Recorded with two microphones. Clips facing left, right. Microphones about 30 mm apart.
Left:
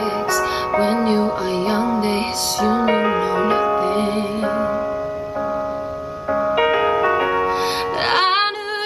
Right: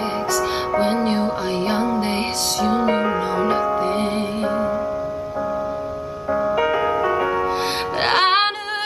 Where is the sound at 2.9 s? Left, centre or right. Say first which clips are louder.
Left 2 dB; centre.